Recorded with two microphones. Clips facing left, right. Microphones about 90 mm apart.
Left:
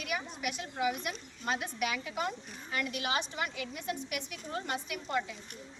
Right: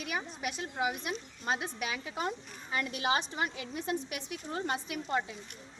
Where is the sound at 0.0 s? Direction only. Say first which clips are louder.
Even; 30° right (ahead or behind).